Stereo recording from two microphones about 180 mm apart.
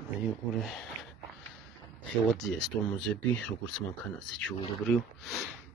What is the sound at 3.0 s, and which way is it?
Speech, 5° left (ahead or behind).